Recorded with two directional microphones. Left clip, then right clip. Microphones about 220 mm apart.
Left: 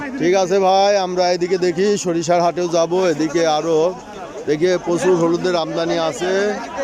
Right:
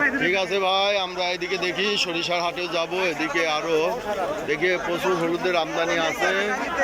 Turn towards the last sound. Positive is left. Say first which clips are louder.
# left 4 dB
turn(degrees=25)  # may be behind; listen again after turning